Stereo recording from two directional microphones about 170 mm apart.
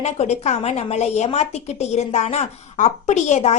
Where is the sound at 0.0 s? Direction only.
40° left (ahead or behind).